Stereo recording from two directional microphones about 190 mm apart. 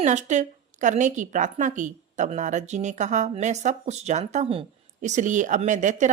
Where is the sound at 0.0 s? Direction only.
40° right (ahead or behind).